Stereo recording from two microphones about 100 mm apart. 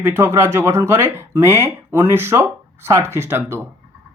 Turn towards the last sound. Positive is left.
turn(degrees=-25)  # may be behind; listen again after turning